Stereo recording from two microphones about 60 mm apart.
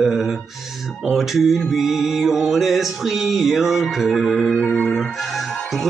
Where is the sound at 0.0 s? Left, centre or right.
Centre.